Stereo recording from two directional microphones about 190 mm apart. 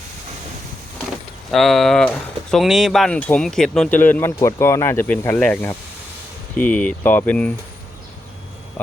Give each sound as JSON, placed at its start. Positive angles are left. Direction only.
{"t": 1.5, "sound": "speech", "side_deg": 0}